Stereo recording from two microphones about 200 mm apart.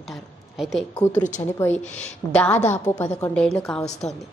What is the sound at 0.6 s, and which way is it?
A woman's voice, centre (ahead or behind).